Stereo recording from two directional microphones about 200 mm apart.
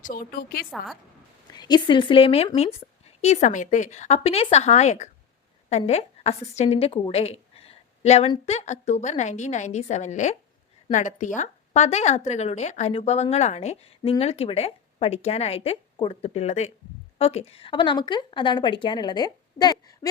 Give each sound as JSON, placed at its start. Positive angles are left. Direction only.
{"t": 0.0, "sound": "a woman's voice", "side_deg": 45}
{"t": 1.5, "sound": "a woman's voice", "side_deg": 20}